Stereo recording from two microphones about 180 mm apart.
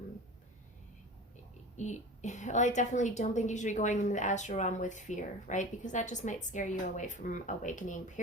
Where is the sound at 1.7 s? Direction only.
40° left (ahead or behind).